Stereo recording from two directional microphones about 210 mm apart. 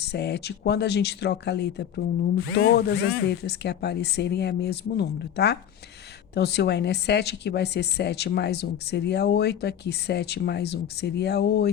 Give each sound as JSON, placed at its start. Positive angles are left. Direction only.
{"t": 0.0, "sound": "a woman's voice", "side_deg": 50}